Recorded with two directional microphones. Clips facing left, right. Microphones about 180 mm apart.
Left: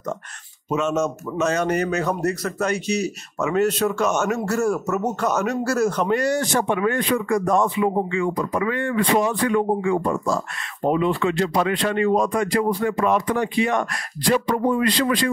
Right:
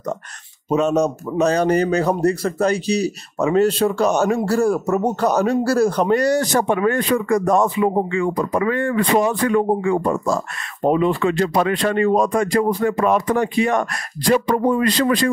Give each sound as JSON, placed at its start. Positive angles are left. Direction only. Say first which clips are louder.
{"t": 0.7, "sound": "a man's voice", "louder": "right 5 dB", "side_deg": -35}